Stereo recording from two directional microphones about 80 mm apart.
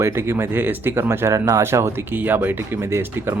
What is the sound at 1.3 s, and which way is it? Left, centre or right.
Speech, right.